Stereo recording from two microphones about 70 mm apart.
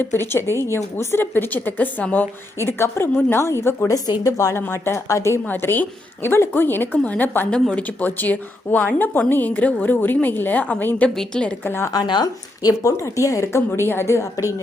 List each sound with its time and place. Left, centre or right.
0.0 s a woman's voice: left
2.6 s a woman's voice: left
3.8 s speech: left
4.3 s speech: left
4.5 s a woman's voice: left
5.5 s a woman's voice: left
11.1 s a woman's voice: centre
11.6 s a woman's voice: left
11.9 s speech: left